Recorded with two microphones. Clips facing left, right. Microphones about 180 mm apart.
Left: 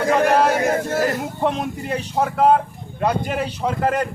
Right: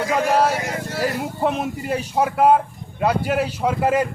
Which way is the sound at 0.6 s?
50° left (ahead or behind).